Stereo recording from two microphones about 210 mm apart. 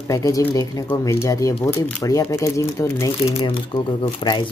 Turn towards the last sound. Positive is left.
turn(degrees=20)  # may be behind; listen again after turning